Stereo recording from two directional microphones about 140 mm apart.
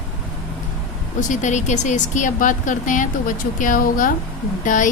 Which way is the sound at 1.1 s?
65° left (ahead or behind).